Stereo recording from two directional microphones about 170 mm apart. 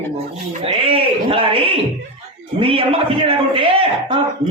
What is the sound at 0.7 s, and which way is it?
A man's voice, 35° right (ahead or behind).